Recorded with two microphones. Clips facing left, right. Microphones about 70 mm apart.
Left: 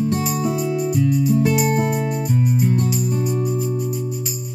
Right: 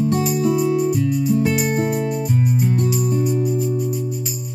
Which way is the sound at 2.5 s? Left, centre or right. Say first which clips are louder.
Even; centre.